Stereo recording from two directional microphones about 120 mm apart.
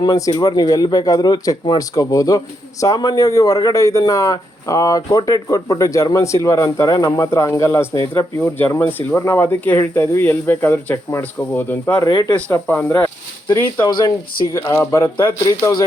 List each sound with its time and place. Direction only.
0.0 s a man's voice: 30° left (ahead or behind)
13.5 s a man's voice: 25° left (ahead or behind)